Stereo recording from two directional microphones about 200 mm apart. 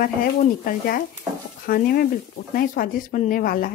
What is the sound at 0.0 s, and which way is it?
Speech, 45° left (ahead or behind).